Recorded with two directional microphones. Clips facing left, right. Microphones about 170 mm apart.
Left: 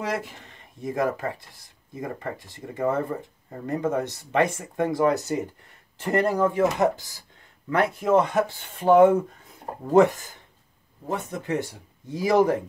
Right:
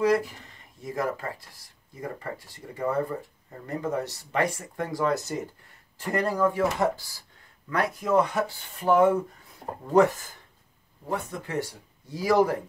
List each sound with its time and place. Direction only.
0.0 s speech: 25° left (ahead or behind)
11.1 s speech: 20° left (ahead or behind)